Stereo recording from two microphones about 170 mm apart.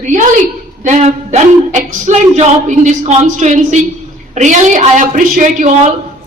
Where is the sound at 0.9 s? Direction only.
45° right (ahead or behind).